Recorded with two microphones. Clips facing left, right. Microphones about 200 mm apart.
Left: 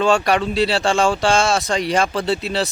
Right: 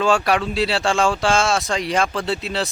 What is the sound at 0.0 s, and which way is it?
Speech, centre (ahead or behind).